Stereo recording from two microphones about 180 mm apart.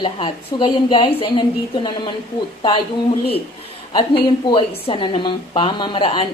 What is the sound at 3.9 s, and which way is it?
A woman's voice, 25° left (ahead or behind).